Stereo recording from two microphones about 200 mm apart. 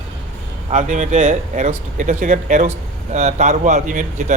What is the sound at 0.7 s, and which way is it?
Speech, 35° right (ahead or behind).